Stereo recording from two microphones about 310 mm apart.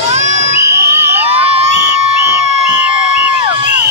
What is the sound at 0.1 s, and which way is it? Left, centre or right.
Crowd, right.